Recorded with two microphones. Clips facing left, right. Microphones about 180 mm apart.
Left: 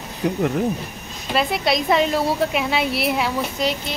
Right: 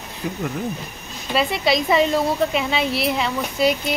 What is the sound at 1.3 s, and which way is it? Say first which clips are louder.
Speech: right 1 dB; centre (ahead or behind).